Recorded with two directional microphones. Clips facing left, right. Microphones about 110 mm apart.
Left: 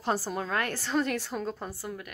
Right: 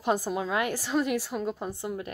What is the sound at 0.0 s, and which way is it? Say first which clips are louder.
A woman's voice: right 3 dB; 20° right (ahead or behind).